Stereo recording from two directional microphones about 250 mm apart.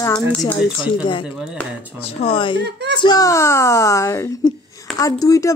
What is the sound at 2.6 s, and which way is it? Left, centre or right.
Speech, right.